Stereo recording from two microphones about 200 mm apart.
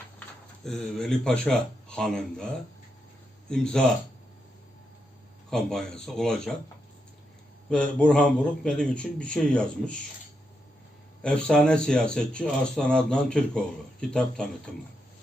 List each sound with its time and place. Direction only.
0.6 s speech: centre (ahead or behind)
3.5 s speech: 5° left (ahead or behind)
5.5 s speech: 5° left (ahead or behind)
7.7 s speech: 5° left (ahead or behind)
11.2 s speech: 5° left (ahead or behind)